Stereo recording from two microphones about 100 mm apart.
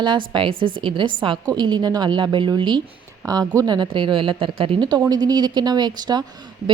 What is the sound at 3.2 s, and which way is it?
A woman's voice, 40° right (ahead or behind).